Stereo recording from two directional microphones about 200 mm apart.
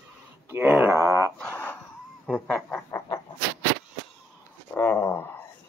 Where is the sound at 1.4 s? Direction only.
10° left (ahead or behind).